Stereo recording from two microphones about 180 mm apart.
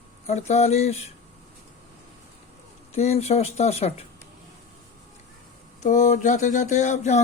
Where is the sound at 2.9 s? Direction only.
35° left (ahead or behind).